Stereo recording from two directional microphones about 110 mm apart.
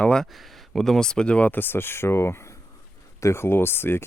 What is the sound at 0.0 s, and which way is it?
Speech, 5° left (ahead or behind).